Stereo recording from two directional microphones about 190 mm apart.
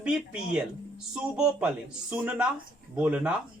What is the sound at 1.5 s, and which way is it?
Speech, 5° right (ahead or behind).